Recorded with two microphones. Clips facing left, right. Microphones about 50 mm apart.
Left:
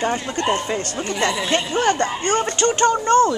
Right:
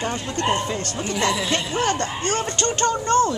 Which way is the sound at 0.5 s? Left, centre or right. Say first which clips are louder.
Left 2 dB; left.